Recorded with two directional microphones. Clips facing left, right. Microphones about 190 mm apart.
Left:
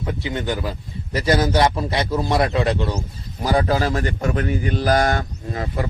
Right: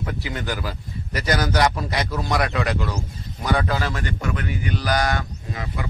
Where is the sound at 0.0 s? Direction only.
20° left (ahead or behind).